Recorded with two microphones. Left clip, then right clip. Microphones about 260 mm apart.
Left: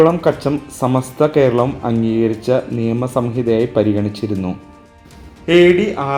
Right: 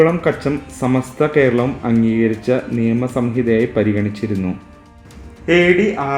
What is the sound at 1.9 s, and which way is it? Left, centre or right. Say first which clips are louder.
Speech: even; centre.